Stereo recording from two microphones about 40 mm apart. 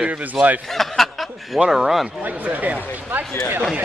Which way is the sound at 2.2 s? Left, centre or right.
Right.